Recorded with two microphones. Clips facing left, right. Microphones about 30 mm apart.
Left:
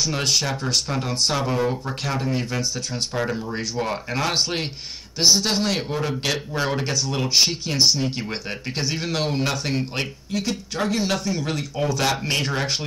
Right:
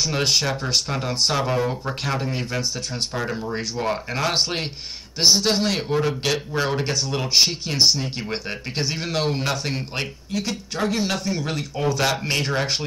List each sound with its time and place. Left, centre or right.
0.0 s a man's voice: centre